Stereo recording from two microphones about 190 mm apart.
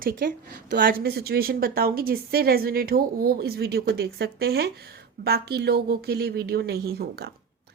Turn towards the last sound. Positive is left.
turn(degrees=-55)  # may be behind; listen again after turning